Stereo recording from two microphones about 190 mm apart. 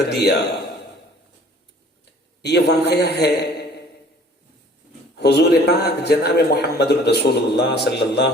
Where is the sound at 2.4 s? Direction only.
60° left (ahead or behind).